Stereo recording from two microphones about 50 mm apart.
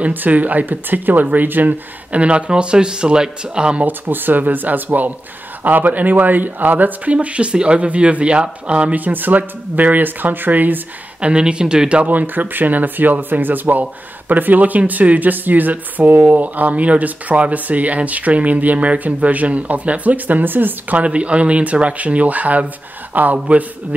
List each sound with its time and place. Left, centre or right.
0.1 s speech: right; by 3.8 s centre
3.8 s speech: right
9.0 s speech: right
11.1 s speech: right
12.1 s speech: right
21.0 s speech: right